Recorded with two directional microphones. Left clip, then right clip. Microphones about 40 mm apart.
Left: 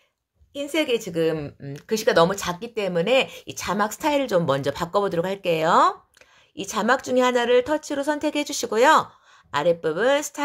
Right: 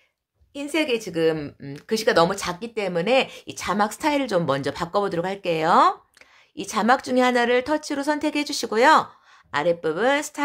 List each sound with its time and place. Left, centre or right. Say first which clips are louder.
0.5 s a woman's voice: left 1 dB; right
1.3 s speech: even; right
1.8 s a woman's voice: even; centre
4.5 s a woman's voice: left 1 dB; centre